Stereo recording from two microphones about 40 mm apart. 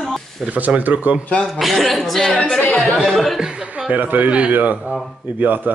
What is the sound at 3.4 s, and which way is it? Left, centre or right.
Chuckle, right.